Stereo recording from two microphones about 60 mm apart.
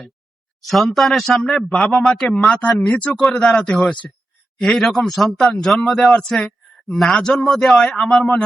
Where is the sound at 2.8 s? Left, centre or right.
Left.